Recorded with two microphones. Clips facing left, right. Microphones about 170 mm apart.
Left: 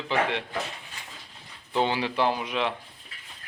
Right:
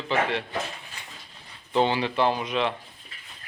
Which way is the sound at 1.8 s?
10° left (ahead or behind).